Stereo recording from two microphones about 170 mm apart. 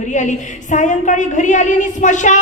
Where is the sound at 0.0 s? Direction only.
45° left (ahead or behind).